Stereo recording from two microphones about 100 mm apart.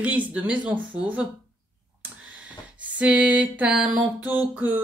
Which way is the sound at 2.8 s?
15° right (ahead or behind).